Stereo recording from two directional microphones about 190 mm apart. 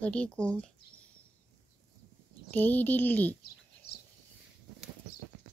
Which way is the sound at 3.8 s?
60° left (ahead or behind).